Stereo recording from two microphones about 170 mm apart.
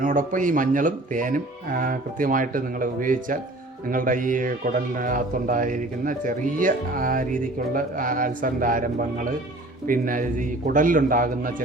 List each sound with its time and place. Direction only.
0.0 s speech: 50° right (ahead or behind)